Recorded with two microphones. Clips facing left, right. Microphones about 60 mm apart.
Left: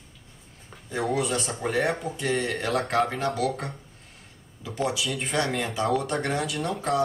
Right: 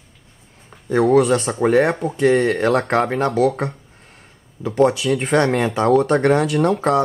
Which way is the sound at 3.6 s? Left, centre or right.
Right.